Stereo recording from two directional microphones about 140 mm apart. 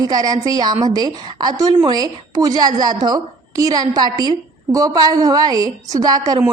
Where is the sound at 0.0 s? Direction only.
25° right (ahead or behind).